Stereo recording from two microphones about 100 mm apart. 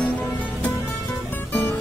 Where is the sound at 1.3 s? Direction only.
20° left (ahead or behind).